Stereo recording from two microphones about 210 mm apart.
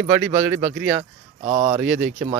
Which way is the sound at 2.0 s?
40° right (ahead or behind).